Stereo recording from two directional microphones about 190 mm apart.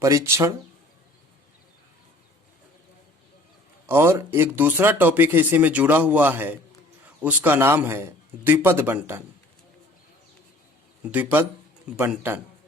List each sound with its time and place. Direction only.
0.0 s speech: 15° right (ahead or behind)
3.8 s speech: 15° right (ahead or behind)
11.1 s speech: 10° right (ahead or behind)